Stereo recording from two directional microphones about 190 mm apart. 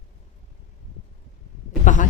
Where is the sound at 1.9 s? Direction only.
40° left (ahead or behind).